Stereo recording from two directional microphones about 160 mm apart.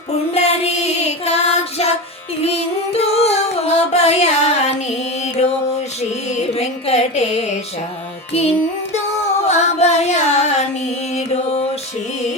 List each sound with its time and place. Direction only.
0.3 s music: 40° left (ahead or behind)
9.5 s music: 45° left (ahead or behind)